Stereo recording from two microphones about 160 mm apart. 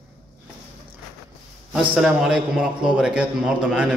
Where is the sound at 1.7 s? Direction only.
5° right (ahead or behind).